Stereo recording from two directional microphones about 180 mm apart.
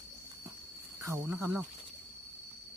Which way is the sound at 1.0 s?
10° right (ahead or behind).